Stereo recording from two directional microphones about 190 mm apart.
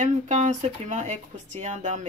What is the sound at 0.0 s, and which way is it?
Speech, 40° right (ahead or behind).